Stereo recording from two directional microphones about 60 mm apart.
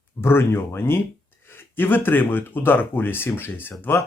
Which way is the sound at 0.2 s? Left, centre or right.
Left.